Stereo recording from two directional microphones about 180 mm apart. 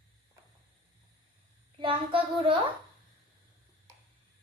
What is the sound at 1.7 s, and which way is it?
Speech, 30° right (ahead or behind).